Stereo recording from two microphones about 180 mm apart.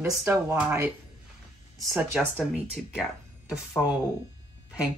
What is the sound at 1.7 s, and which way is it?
Speech, 15° right (ahead or behind).